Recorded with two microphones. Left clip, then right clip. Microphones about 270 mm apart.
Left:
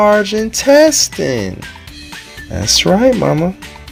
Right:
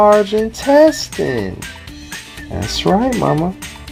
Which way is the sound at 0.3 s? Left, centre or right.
Left.